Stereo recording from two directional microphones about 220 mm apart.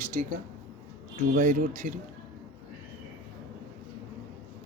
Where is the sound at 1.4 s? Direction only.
35° right (ahead or behind).